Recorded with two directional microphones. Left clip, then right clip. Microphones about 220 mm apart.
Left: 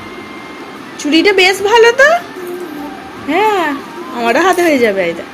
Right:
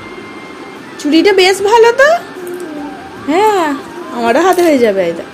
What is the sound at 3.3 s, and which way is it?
Speech, 15° right (ahead or behind).